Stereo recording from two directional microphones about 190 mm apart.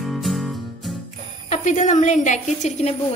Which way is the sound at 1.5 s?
40° left (ahead or behind).